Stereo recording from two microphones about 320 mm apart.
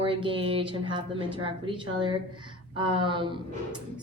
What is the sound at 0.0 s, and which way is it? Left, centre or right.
Speech, centre.